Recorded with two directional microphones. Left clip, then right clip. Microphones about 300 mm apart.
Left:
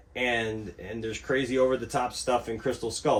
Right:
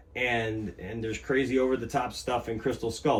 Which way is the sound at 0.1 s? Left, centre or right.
Centre.